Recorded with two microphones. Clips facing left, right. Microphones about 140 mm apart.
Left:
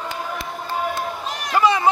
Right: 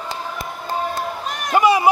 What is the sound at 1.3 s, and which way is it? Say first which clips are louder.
Run: right 4 dB; 50° right (ahead or behind).